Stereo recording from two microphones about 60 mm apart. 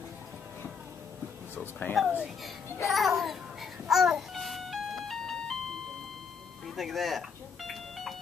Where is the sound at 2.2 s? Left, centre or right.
Centre.